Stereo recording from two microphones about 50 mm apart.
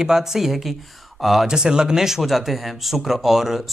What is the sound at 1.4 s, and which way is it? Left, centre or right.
Speech, centre.